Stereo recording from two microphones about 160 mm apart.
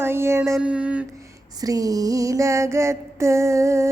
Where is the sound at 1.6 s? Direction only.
20° right (ahead or behind).